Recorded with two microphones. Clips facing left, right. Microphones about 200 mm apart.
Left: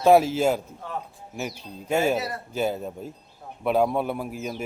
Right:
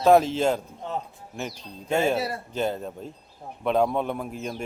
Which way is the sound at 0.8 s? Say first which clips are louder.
Right 4 dB; 25° right (ahead or behind).